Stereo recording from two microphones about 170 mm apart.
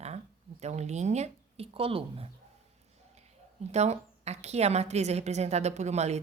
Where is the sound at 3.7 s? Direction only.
40° right (ahead or behind).